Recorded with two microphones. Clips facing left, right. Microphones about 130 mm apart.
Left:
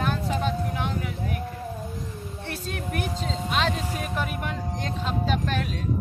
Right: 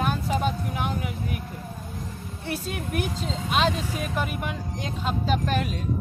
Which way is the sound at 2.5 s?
10° right (ahead or behind).